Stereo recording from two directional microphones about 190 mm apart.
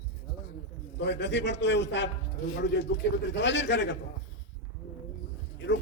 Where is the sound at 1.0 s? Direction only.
65° left (ahead or behind).